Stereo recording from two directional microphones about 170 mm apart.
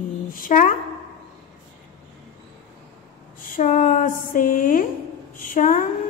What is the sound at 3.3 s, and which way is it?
A woman's voice, 50° left (ahead or behind).